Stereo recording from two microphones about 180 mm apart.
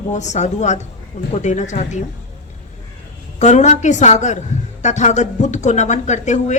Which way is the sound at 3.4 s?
40° left (ahead or behind).